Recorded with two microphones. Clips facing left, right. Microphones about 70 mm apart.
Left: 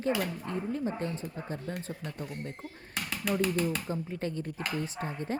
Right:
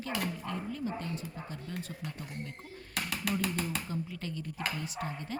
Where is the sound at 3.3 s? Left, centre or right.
Left.